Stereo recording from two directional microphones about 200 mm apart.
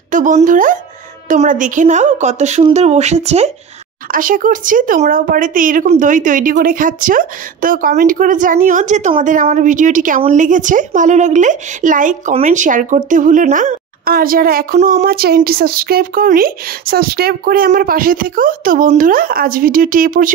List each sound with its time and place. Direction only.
0.1 s a woman's voice: 40° right (ahead or behind)
4.1 s a woman's voice: 45° right (ahead or behind)